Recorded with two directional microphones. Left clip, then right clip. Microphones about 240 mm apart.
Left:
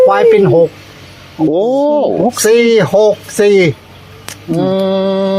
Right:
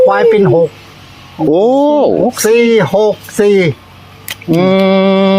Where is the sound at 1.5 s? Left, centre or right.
Right.